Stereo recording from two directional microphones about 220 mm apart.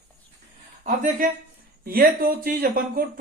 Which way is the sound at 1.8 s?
40° right (ahead or behind).